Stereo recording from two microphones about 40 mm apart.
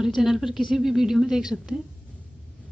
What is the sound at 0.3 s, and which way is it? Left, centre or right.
A woman's voice, centre.